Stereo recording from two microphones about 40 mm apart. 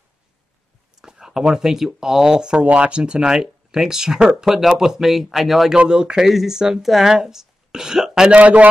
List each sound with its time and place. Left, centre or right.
1.0 s speech: centre
2.6 s speech: right; by 5.7 s centre
5.8 s speech: right
6.2 s speech: centre
8.4 s a man's voice: right